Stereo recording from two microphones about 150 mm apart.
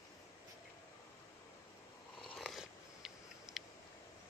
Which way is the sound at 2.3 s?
Centre (ahead or behind).